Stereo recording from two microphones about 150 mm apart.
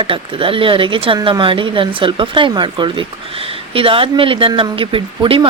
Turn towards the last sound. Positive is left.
turn(degrees=-35)  # may be behind; listen again after turning